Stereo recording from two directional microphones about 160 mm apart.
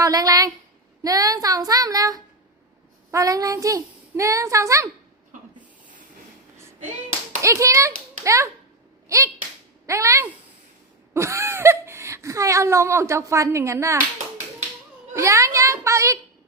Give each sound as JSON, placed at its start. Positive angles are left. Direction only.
{"t": 0.0, "sound": "a woman's voice", "side_deg": -25}
{"t": 7.4, "sound": "a child's voice", "side_deg": -20}
{"t": 15.1, "sound": "speech", "side_deg": -20}